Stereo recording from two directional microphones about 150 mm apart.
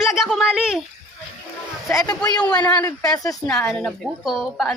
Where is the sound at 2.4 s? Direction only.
5° left (ahead or behind).